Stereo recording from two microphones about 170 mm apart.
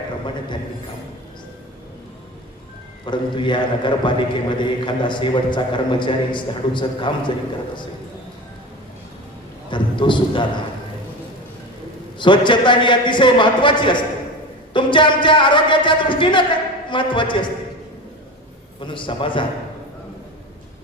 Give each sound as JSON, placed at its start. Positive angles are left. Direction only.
{"t": 3.1, "sound": "a man's voice", "side_deg": 30}
{"t": 9.6, "sound": "a man's voice", "side_deg": 30}
{"t": 12.2, "sound": "a man's voice", "side_deg": 30}
{"t": 18.8, "sound": "a man's voice", "side_deg": 30}